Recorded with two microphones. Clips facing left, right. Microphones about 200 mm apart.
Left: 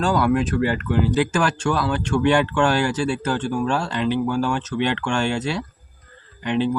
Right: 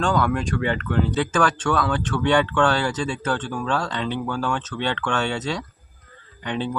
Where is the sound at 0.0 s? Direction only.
5° left (ahead or behind).